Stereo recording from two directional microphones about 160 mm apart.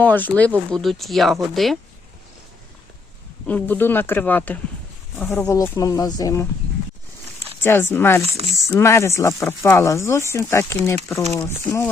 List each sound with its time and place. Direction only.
0.0 s speech: 10° left (ahead or behind)
3.4 s speech: 10° left (ahead or behind)
7.6 s speech: 15° left (ahead or behind)